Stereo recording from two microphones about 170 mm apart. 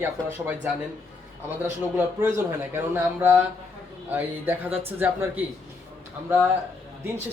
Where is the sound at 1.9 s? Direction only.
15° right (ahead or behind).